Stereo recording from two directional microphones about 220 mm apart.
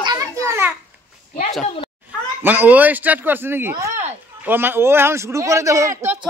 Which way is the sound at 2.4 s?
10° right (ahead or behind).